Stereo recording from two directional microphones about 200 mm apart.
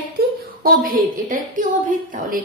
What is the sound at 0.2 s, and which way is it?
A woman's voice, 45° right (ahead or behind).